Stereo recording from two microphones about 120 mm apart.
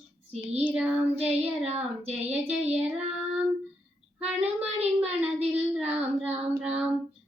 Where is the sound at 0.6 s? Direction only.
10° right (ahead or behind).